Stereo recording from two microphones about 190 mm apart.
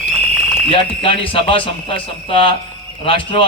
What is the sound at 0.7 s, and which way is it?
A man's voice, 30° left (ahead or behind).